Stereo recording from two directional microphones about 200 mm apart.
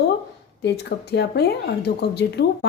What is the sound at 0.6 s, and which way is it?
Speech, 55° left (ahead or behind).